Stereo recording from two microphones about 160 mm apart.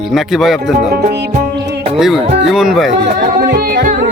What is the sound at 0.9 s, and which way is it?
Music, 75° right (ahead or behind).